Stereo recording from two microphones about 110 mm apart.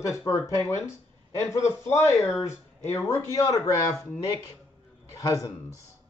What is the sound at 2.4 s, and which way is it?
Speech, 25° left (ahead or behind).